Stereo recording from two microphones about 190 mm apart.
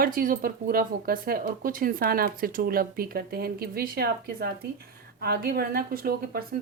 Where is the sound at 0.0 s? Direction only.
50° right (ahead or behind).